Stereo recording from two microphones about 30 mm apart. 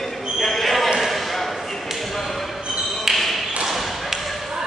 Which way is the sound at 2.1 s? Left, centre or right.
Centre.